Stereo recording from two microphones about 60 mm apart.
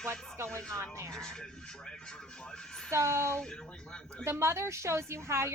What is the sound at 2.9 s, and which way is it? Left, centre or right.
Speech, right.